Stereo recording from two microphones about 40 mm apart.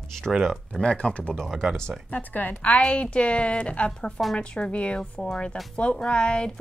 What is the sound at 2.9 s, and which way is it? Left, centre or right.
A woman's voice, left.